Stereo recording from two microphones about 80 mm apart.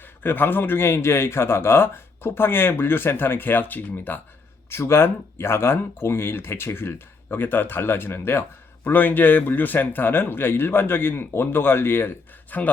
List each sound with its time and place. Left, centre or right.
0.2 s speech: left